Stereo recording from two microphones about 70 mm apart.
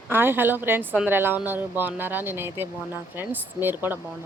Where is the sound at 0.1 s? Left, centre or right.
Right.